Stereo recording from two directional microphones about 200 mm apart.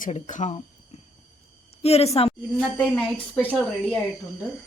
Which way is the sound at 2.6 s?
5° left (ahead or behind).